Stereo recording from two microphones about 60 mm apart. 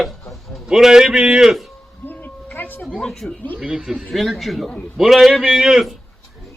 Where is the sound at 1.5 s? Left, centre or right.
Centre.